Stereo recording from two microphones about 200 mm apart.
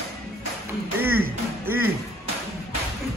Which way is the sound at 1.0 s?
10° right (ahead or behind).